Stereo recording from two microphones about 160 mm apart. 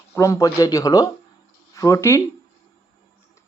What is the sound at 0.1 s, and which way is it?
Speech, 20° left (ahead or behind).